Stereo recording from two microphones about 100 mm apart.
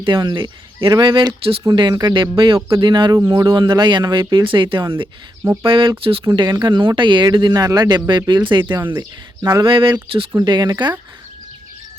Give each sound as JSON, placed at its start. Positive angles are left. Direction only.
{"t": 0.0, "sound": "speech", "side_deg": -55}
{"t": 2.6, "sound": "a sound", "side_deg": -30}
{"t": 2.8, "sound": "speech", "side_deg": -50}
{"t": 3.2, "sound": "a sound", "side_deg": -30}
{"t": 3.4, "sound": "speech", "side_deg": -50}
{"t": 6.3, "sound": "speech", "side_deg": -50}
{"t": 9.4, "sound": "a sound", "side_deg": -30}
{"t": 9.6, "sound": "speech", "side_deg": -60}
{"t": 10.4, "sound": "speech", "side_deg": -45}